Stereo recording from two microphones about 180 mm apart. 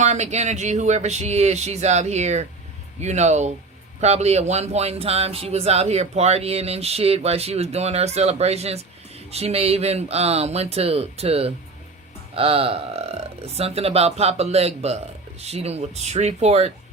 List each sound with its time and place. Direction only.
0.0 s speech: 40° right (ahead or behind)